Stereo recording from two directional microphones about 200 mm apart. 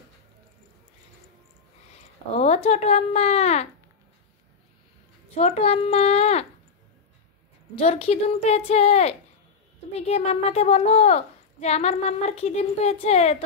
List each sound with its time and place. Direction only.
2.3 s a woman's voice: 35° left (ahead or behind)
5.3 s a woman's voice: 30° left (ahead or behind)
7.7 s a woman's voice: 30° left (ahead or behind)